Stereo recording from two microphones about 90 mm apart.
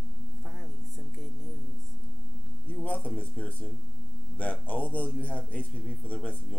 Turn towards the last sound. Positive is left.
turn(degrees=15)  # may be behind; listen again after turning